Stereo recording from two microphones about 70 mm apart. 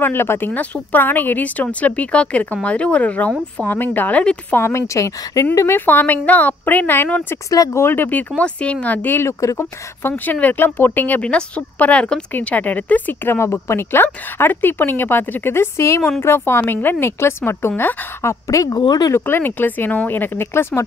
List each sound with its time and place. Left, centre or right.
0.0 s a woman's voice: left
4.2 s a woman's voice: centre
4.6 s speech: left
5.7 s speech: left
7.4 s speech: left
7.8 s a woman's voice: left
8.4 s a woman's voice: centre
9.2 s speech: left
10.0 s a woman's voice: left
18.7 s speech: left
19.1 s speech: left